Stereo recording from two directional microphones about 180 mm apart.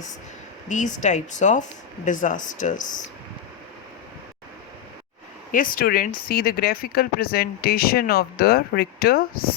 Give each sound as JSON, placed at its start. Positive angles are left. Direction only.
{"t": 0.7, "sound": "speech", "side_deg": 45}
{"t": 5.5, "sound": "speech", "side_deg": 50}